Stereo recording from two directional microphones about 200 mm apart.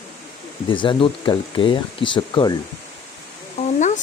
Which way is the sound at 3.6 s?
35° left (ahead or behind).